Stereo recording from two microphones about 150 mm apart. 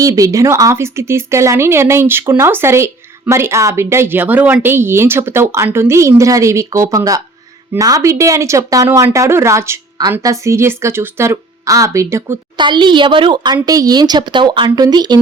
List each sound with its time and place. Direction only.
0.0 s speech: 25° right (ahead or behind)
12.5 s speech: 30° right (ahead or behind)